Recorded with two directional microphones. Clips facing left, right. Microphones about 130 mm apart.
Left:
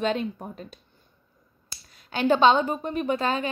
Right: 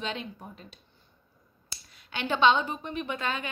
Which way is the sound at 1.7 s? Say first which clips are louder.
Left 6 dB; 40° left (ahead or behind).